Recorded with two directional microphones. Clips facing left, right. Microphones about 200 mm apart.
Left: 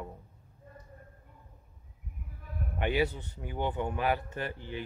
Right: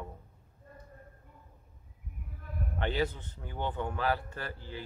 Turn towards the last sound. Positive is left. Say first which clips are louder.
# left 4 dB
turn(degrees=20)  # may be behind; listen again after turning